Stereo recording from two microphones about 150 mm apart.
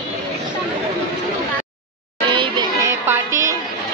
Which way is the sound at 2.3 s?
35° right (ahead or behind).